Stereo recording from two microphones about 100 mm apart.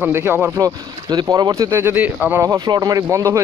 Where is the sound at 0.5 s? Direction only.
35° right (ahead or behind); by 2.4 s 15° right (ahead or behind).